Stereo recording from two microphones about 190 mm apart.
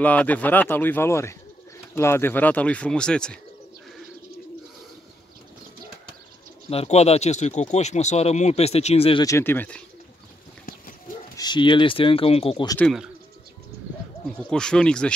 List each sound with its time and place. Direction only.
0.0 s speech: 10° left (ahead or behind)
6.7 s speech: 35° left (ahead or behind)
9.2 s speech: 15° left (ahead or behind)
11.3 s speech: 25° left (ahead or behind)
12.7 s speech: centre (ahead or behind)
14.5 s speech: 5° left (ahead or behind)